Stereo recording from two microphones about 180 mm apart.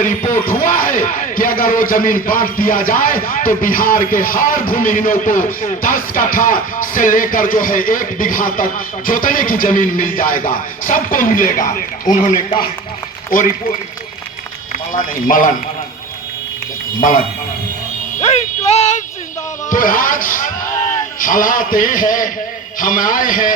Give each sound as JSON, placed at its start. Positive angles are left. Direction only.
{"t": 0.0, "sound": "speech", "side_deg": 45}
{"t": 14.9, "sound": "speech", "side_deg": 50}
{"t": 17.0, "sound": "speech", "side_deg": 50}
{"t": 18.2, "sound": "music", "side_deg": 35}
{"t": 19.7, "sound": "speech", "side_deg": 50}